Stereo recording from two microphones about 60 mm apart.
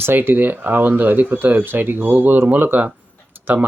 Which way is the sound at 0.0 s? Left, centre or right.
Right.